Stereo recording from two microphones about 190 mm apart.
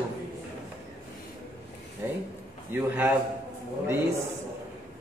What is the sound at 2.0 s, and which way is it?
Speech, 15° right (ahead or behind).